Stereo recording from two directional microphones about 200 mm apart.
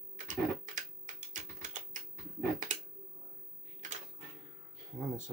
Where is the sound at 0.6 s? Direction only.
40° right (ahead or behind).